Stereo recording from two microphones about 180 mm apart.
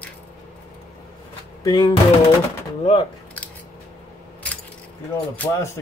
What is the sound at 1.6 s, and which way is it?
Speech, 20° left (ahead or behind).